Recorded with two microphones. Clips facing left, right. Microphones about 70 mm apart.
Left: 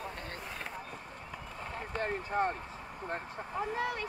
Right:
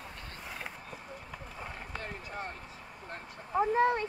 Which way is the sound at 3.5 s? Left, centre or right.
Right.